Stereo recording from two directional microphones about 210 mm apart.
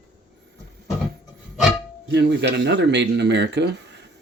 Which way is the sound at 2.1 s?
55° right (ahead or behind).